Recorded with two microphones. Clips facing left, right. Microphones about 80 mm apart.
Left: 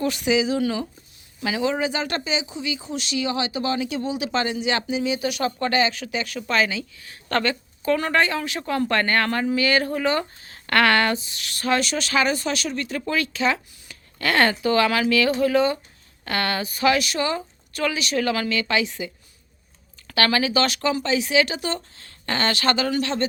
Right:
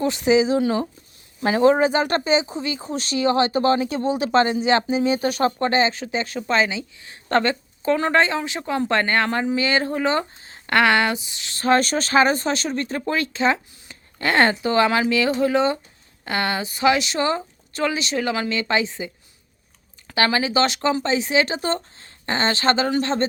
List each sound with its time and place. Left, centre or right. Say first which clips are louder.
0.0 s speech: right 4 dB; right